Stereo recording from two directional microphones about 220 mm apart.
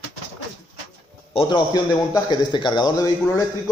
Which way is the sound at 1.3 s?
20° left (ahead or behind).